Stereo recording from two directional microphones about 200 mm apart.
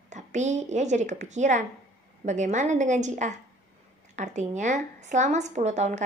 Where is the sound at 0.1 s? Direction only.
35° right (ahead or behind).